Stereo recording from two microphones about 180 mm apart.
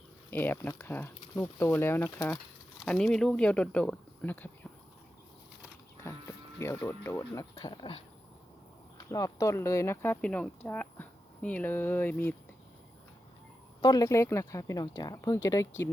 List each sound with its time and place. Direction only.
0.3 s speech: 10° left (ahead or behind)
2.8 s speech: 5° left (ahead or behind)
6.0 s speech: 15° left (ahead or behind)
9.0 s speech: 15° left (ahead or behind)
13.8 s speech: 20° left (ahead or behind)